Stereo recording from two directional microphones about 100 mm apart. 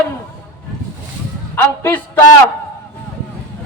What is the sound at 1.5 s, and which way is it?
Speech, 20° left (ahead or behind).